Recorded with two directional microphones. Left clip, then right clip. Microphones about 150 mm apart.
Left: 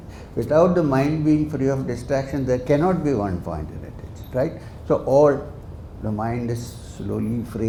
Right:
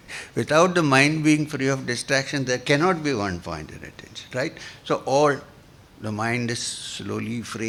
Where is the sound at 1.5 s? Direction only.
45° right (ahead or behind).